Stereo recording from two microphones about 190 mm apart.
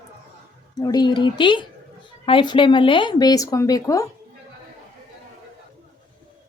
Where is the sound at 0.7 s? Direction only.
20° left (ahead or behind).